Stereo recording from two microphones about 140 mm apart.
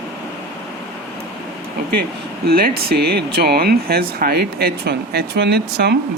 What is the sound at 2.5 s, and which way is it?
Speech, 90° right.